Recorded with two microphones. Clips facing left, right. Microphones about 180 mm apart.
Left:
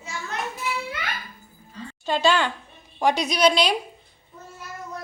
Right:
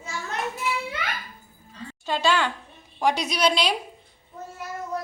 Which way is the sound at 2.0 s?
5° right (ahead or behind).